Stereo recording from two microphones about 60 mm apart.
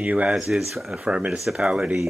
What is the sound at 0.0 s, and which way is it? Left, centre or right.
Speech, right.